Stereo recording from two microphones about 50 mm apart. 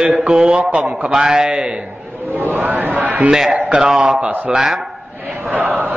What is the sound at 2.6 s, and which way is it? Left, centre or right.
Music, right.